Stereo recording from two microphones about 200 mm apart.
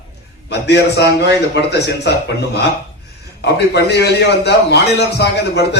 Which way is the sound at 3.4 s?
55° left (ahead or behind).